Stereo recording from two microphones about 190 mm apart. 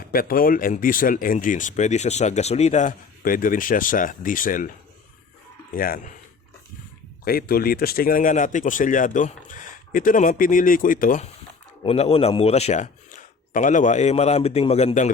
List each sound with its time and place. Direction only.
0.1 s speech: 50° left (ahead or behind)
5.7 s speech: 50° left (ahead or behind)
7.3 s speech: 50° left (ahead or behind)
11.8 s a man's voice: 30° left (ahead or behind)